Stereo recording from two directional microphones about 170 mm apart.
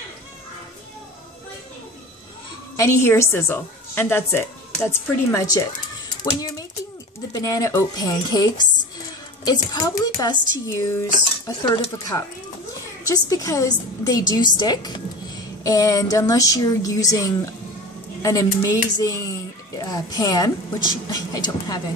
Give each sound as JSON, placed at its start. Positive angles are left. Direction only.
{"t": 2.7, "sound": "a woman's voice", "side_deg": 15}
{"t": 7.3, "sound": "speech", "side_deg": 20}